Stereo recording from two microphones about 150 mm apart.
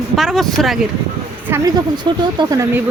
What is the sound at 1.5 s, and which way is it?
Speech, 25° right (ahead or behind).